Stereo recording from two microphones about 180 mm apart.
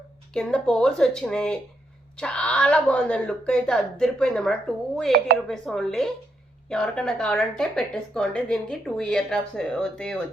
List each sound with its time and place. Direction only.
0.3 s speech: 5° left (ahead or behind)
5.1 s speech: 60° right (ahead or behind)
5.5 s speech: centre (ahead or behind)